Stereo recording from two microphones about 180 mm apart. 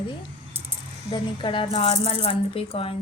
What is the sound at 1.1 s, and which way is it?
Speech, 25° left (ahead or behind).